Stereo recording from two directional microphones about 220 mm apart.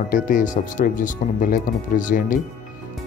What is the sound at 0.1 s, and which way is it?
Speech, 35° left (ahead or behind).